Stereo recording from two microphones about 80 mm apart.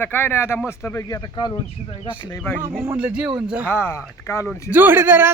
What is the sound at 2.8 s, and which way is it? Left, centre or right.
Speech, centre.